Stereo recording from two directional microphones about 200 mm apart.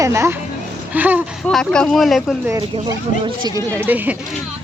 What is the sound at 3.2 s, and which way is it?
Speech, 20° right (ahead or behind).